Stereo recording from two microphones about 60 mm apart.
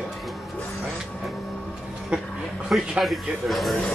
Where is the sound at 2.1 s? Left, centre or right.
Centre.